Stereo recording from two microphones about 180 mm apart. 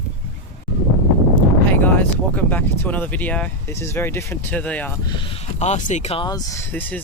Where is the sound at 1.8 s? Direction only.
10° left (ahead or behind).